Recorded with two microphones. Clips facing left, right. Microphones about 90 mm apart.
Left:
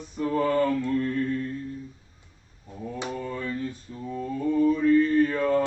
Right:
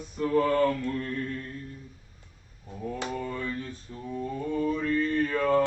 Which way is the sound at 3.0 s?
10° left (ahead or behind).